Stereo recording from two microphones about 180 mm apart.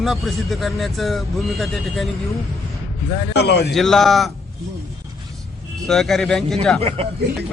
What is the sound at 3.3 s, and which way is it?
Speech, 65° left (ahead or behind).